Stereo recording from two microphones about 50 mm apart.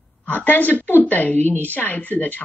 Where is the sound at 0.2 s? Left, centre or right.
Left.